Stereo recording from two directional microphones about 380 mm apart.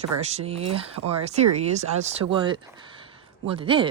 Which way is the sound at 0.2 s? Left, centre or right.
Centre.